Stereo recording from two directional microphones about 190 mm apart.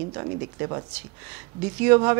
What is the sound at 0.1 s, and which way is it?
A woman's voice, 20° right (ahead or behind).